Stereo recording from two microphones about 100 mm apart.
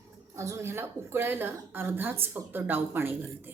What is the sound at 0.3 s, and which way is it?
A woman's voice, 30° right (ahead or behind).